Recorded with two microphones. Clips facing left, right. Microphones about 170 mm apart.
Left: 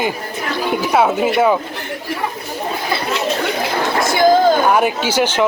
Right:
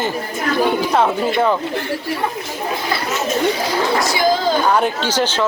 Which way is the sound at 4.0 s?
55° left (ahead or behind).